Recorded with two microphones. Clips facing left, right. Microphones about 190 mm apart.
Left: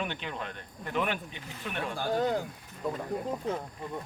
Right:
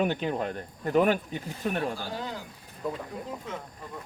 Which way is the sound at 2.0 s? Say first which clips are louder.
Left 7 dB; 50° left (ahead or behind).